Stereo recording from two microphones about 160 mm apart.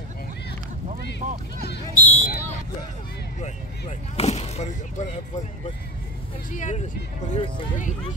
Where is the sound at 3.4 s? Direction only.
45° left (ahead or behind).